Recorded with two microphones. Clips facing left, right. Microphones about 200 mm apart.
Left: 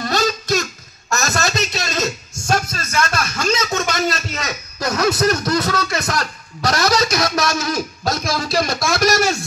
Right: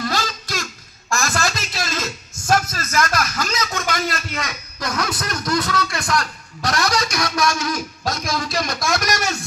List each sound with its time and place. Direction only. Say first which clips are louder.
0.0 s babbling: left 5 dB; 25° left (ahead or behind)
1.1 s a sound: left 2 dB; 25° left (ahead or behind)
8.8 s speech: left 6 dB; 30° left (ahead or behind)